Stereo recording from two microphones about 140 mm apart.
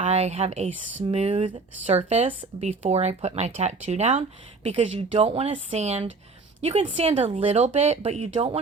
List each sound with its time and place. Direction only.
0.0 s a woman's voice: 50° right (ahead or behind)